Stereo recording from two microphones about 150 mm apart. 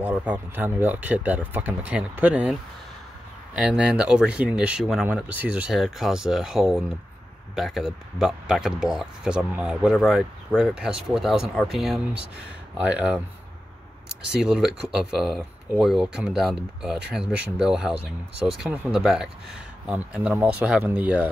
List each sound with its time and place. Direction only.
0.0 s speech: 10° right (ahead or behind)
3.5 s speech: 5° right (ahead or behind)
14.3 s speech: 5° right (ahead or behind)